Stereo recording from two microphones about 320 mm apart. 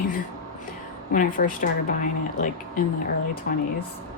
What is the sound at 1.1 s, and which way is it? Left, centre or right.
Speech, left.